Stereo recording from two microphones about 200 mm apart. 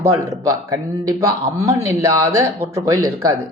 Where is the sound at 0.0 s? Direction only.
15° right (ahead or behind).